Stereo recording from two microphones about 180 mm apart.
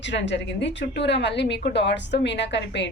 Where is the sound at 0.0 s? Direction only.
80° left.